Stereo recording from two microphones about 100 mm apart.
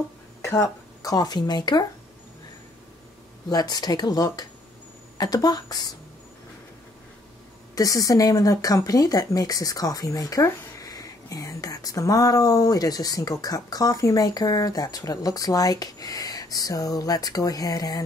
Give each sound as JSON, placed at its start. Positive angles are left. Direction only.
{"t": 0.4, "sound": "speech", "side_deg": 35}
{"t": 3.4, "sound": "speech", "side_deg": 40}
{"t": 7.7, "sound": "speech", "side_deg": 35}